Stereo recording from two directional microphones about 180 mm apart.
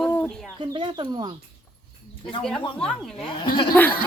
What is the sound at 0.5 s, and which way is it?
Speech, 25° right (ahead or behind).